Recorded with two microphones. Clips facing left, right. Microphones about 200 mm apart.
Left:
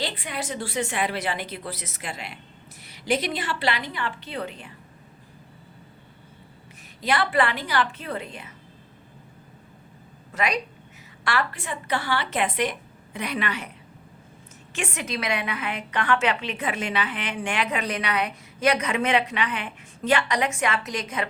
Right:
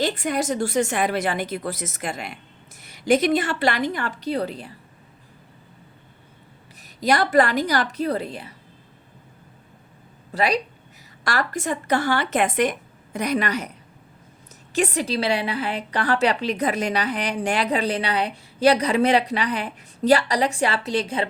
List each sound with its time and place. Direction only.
0.0 s a woman's voice: 45° right (ahead or behind)
7.0 s a woman's voice: 40° right (ahead or behind)
10.3 s a woman's voice: 35° right (ahead or behind)